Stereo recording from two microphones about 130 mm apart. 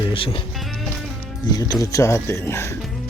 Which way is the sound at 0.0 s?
45° left (ahead or behind).